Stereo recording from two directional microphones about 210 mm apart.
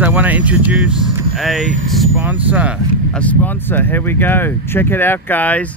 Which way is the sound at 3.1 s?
5° left (ahead or behind).